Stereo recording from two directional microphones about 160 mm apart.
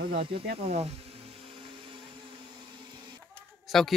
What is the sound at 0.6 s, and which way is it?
Speech, 40° right (ahead or behind).